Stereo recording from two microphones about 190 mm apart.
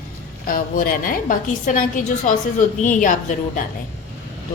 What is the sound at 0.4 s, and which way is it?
A woman's voice, 45° left (ahead or behind).